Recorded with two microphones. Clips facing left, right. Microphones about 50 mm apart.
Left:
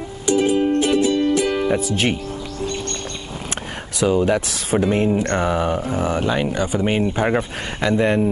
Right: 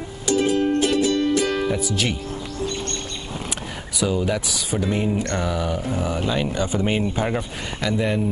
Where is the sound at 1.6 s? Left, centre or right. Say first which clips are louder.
Left 4 dB; left.